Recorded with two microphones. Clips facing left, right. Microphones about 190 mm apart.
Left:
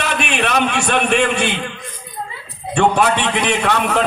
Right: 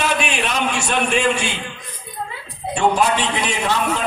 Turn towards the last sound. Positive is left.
turn(degrees=60)  # may be behind; listen again after turning